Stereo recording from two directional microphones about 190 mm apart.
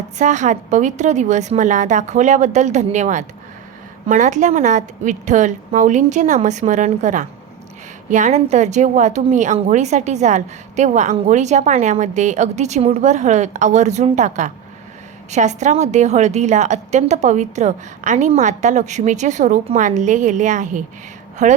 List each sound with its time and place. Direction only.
0.2 s a woman's voice: 40° right (ahead or behind)